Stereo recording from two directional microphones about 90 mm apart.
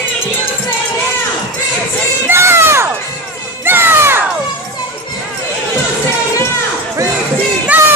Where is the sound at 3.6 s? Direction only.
25° right (ahead or behind).